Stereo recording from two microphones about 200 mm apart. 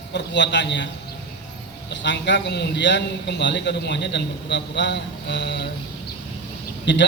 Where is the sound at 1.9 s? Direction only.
60° left (ahead or behind).